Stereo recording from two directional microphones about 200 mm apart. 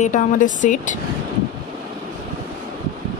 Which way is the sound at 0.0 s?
40° left (ahead or behind).